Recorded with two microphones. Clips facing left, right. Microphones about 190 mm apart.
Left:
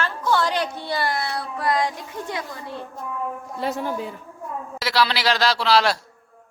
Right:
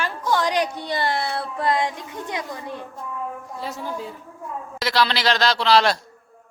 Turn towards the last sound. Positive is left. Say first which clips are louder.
# right 1 dB
turn(degrees=5)  # may be behind; listen again after turning